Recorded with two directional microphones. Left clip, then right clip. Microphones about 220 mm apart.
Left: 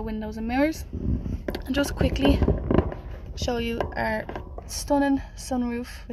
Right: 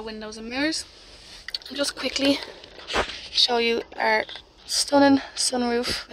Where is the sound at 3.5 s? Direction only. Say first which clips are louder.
Right 4 dB; 20° right (ahead or behind).